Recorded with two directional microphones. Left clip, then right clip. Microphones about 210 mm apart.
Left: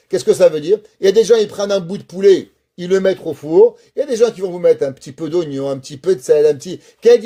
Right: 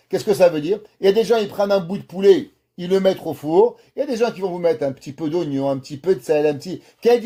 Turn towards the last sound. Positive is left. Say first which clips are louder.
# left 6 dB
turn(degrees=40)  # may be behind; listen again after turning